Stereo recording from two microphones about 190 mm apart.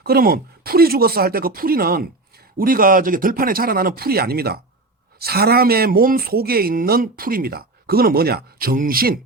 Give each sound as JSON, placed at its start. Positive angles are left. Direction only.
{"t": 0.0, "sound": "speech", "side_deg": -55}